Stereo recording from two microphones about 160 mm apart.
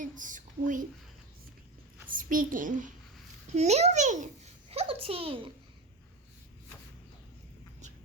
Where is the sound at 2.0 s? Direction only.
60° right (ahead or behind).